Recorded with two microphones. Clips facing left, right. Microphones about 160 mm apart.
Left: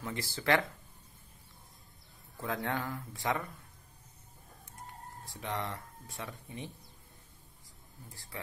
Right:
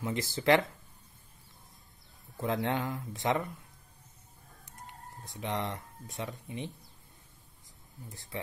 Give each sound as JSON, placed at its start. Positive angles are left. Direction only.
{"t": 0.0, "sound": "speech", "side_deg": -20}
{"t": 2.3, "sound": "speech", "side_deg": -20}
{"t": 5.2, "sound": "speech", "side_deg": -20}
{"t": 8.1, "sound": "speech", "side_deg": -20}